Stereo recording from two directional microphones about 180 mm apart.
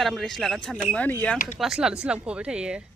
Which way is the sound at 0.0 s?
Centre (ahead or behind).